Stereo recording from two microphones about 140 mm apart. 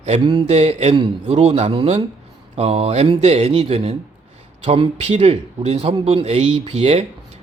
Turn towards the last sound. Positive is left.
turn(degrees=-45)  # may be behind; listen again after turning